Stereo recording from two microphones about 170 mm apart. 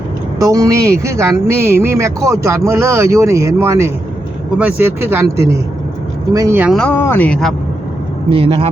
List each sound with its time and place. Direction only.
0.3 s speech: 20° right (ahead or behind)
6.7 s speech: 10° left (ahead or behind)
8.3 s speech: 35° right (ahead or behind)